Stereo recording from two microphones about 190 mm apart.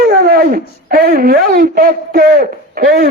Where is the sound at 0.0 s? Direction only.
50° right (ahead or behind).